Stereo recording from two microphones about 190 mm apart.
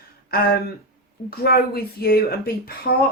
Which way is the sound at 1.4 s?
55° left (ahead or behind).